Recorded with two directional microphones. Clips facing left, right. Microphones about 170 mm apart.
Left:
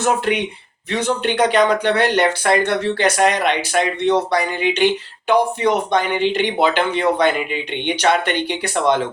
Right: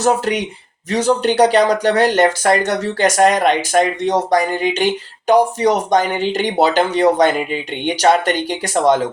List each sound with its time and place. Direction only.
0.0 s speech: 40° right (ahead or behind)